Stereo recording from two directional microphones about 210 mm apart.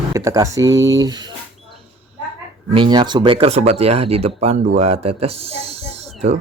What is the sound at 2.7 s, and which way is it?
Speech, 25° right (ahead or behind).